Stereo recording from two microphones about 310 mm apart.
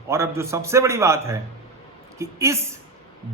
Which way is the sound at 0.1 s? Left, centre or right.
Centre.